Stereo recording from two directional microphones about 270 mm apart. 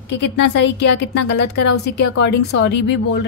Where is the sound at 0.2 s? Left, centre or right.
Left.